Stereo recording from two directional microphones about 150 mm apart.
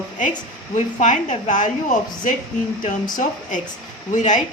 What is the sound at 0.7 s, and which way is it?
Speech, 55° left (ahead or behind).